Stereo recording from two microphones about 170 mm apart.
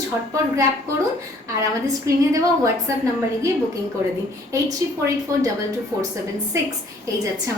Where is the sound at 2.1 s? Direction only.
15° right (ahead or behind).